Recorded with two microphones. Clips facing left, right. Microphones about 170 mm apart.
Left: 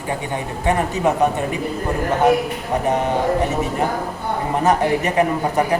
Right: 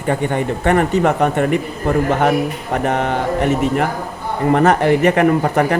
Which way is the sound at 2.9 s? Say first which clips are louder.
Even; 65° right (ahead or behind).